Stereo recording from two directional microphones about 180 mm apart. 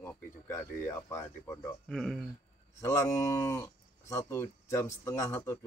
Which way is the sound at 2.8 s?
15° left (ahead or behind).